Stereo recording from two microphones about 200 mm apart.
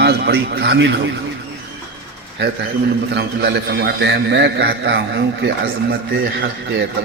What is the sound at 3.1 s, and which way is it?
A man's voice, 55° right (ahead or behind).